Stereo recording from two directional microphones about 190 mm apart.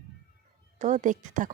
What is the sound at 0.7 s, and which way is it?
Speech, 40° right (ahead or behind).